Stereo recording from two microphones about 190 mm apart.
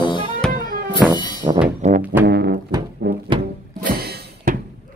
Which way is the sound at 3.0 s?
60° right (ahead or behind).